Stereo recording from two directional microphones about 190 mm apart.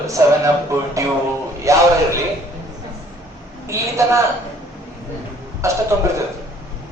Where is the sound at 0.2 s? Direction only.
15° right (ahead or behind).